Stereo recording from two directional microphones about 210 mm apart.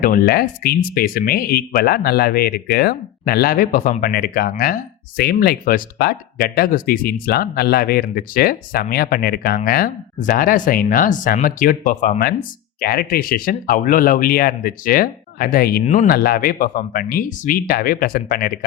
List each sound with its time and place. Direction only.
0.0 s speech: 45° left (ahead or behind)